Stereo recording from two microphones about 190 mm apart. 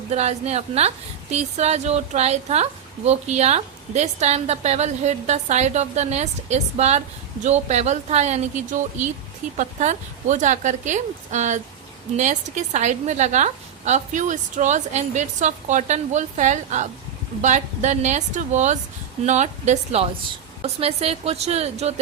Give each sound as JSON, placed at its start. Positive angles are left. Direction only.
{"t": 0.1, "sound": "a woman's voice", "side_deg": -35}